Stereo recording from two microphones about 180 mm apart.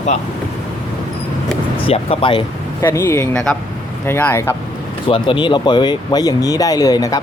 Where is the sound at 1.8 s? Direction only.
30° left (ahead or behind).